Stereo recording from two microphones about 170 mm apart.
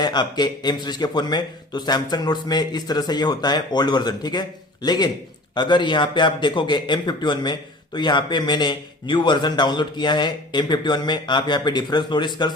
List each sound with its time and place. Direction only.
0.0 s a man's voice: 25° left (ahead or behind)